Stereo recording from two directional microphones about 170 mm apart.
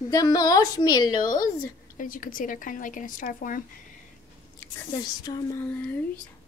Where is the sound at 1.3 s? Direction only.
50° left (ahead or behind).